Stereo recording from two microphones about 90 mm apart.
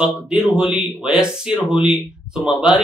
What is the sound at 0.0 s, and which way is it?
A man's voice, 5° right (ahead or behind).